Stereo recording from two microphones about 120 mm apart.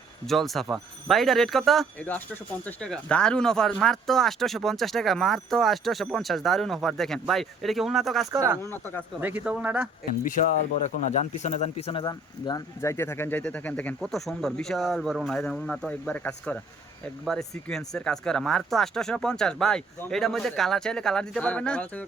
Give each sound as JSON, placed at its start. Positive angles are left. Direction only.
{"t": 0.3, "sound": "speech", "side_deg": 0}
{"t": 2.0, "sound": "speech", "side_deg": 15}
{"t": 8.3, "sound": "speech", "side_deg": -25}
{"t": 8.6, "sound": "speech", "side_deg": 20}
{"t": 9.2, "sound": "speech", "side_deg": -10}
{"t": 10.2, "sound": "speech", "side_deg": 90}
{"t": 12.0, "sound": "speech", "side_deg": 35}
{"t": 12.8, "sound": "speech", "side_deg": 20}